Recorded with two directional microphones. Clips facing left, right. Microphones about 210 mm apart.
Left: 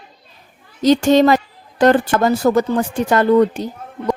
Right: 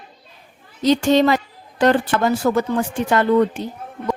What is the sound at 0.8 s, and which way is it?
A woman's voice, 45° left (ahead or behind).